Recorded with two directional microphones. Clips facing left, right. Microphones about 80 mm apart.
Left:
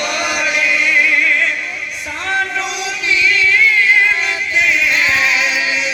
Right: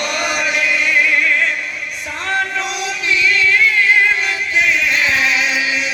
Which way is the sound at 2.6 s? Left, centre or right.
Right.